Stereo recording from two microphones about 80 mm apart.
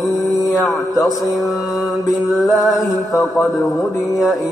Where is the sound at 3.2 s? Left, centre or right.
Left.